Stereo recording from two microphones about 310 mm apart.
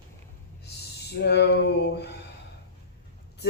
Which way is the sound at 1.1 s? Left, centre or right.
Left.